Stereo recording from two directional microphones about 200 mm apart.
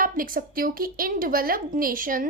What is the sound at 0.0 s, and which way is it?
A woman's voice, 45° right (ahead or behind).